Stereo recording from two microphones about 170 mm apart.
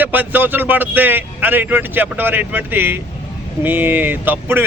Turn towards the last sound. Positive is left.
turn(degrees=-10)  # may be behind; listen again after turning